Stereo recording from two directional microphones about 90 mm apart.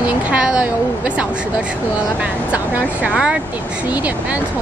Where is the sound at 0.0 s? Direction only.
10° right (ahead or behind).